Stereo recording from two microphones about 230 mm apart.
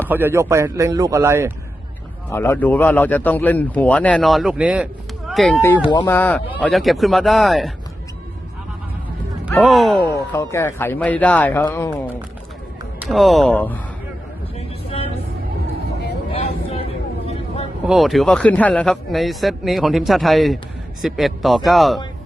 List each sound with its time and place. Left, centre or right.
0.1 s a man's voice: centre
2.3 s a man's voice: centre
9.6 s a man's voice: centre
10.0 s a man's voice: centre
14.9 s vehicle: left
16.3 s vehicle: left
17.8 s a man's voice: centre